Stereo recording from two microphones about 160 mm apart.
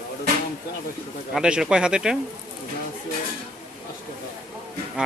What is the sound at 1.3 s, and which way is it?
Speech, 5° right (ahead or behind).